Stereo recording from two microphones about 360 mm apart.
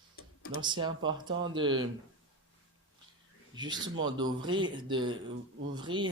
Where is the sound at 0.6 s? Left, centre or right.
Centre.